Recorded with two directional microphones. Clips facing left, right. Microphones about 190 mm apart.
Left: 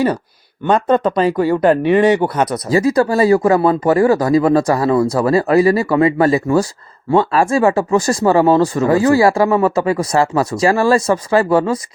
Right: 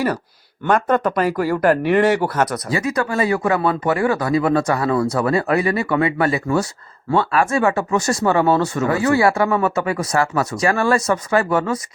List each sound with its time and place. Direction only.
0.6 s speech: 20° left (ahead or behind)
2.6 s speech: 35° left (ahead or behind)